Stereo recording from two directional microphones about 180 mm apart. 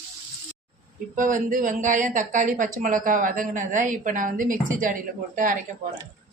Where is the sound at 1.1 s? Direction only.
50° right (ahead or behind).